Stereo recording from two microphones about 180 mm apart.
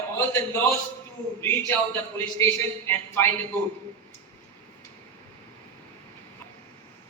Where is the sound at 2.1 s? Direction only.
15° left (ahead or behind).